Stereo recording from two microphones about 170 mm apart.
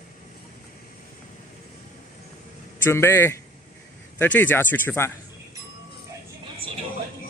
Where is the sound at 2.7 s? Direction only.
15° left (ahead or behind).